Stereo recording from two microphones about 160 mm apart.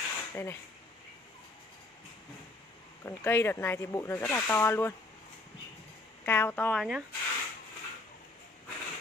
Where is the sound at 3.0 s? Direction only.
15° left (ahead or behind).